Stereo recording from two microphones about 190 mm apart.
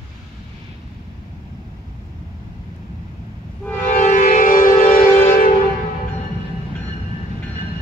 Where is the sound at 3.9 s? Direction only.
40° left (ahead or behind).